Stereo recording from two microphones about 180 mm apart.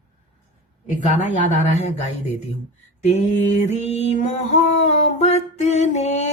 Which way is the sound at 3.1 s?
40° left (ahead or behind).